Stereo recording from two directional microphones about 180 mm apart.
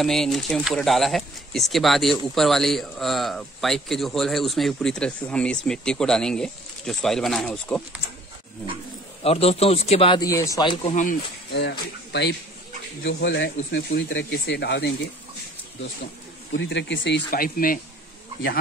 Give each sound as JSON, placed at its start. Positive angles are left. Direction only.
{"t": 0.0, "sound": "speech", "side_deg": 0}
{"t": 9.2, "sound": "a man's voice", "side_deg": 35}
{"t": 10.2, "sound": "speech", "side_deg": 20}
{"t": 10.8, "sound": "a man's voice", "side_deg": 40}
{"t": 11.5, "sound": "speech", "side_deg": 70}
{"t": 16.5, "sound": "speech", "side_deg": 80}
{"t": 17.3, "sound": "speech", "side_deg": 55}